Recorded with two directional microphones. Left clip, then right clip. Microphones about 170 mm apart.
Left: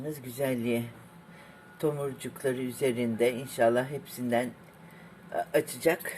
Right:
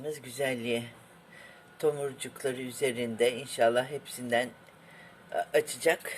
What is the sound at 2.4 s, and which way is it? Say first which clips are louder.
Speech: left 2 dB; centre (ahead or behind).